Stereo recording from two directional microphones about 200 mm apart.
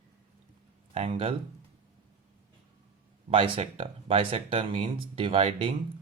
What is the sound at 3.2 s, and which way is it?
Speech, 25° right (ahead or behind).